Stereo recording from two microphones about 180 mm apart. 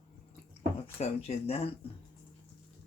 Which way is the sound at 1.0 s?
35° left (ahead or behind).